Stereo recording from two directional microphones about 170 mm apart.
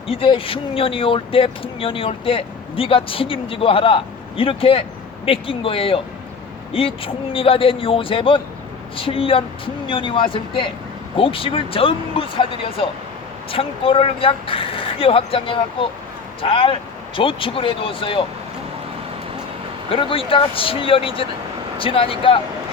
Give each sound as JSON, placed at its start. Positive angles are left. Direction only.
{"t": 0.1, "sound": "speech", "side_deg": 30}
{"t": 19.9, "sound": "speech", "side_deg": 30}